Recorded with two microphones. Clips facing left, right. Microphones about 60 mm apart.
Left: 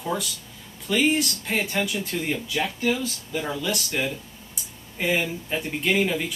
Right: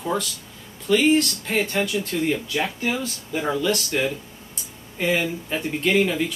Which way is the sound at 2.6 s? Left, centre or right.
Right.